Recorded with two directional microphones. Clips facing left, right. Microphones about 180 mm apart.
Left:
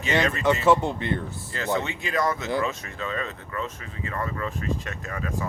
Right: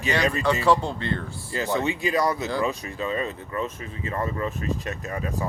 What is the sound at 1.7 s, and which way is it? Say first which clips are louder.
Speech: right 3 dB; 15° right (ahead or behind).